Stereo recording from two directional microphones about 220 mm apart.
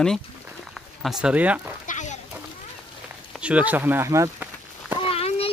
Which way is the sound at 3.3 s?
5° right (ahead or behind).